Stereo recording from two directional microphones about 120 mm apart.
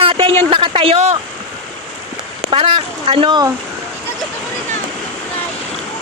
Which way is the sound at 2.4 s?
50° right (ahead or behind).